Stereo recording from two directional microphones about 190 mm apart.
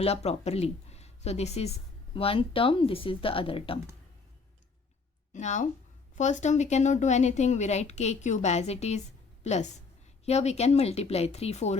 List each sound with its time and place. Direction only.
0.0 s speech: 35° left (ahead or behind)
5.3 s a woman's voice: 40° left (ahead or behind)